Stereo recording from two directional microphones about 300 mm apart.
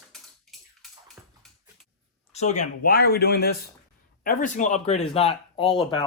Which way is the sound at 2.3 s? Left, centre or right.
Left.